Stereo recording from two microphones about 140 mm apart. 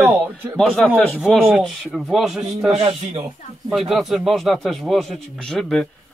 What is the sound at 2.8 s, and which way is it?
Speech, 45° right (ahead or behind).